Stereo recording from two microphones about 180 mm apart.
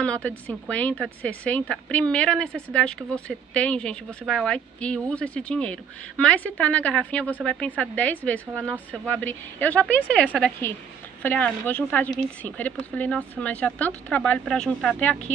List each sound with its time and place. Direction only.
0.0 s a woman's voice: 5° left (ahead or behind)